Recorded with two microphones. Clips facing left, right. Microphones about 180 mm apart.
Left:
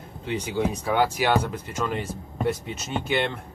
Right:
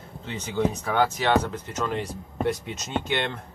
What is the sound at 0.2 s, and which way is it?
Speech, 15° left (ahead or behind).